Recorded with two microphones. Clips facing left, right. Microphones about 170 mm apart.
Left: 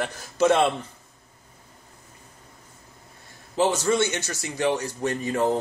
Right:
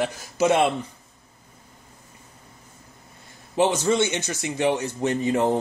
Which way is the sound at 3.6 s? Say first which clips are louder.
Right 1 dB; 20° right (ahead or behind).